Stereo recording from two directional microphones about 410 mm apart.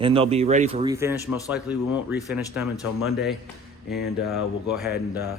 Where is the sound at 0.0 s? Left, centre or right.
Centre.